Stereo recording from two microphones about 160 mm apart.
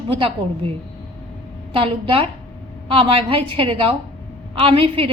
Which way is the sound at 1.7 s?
35° right (ahead or behind).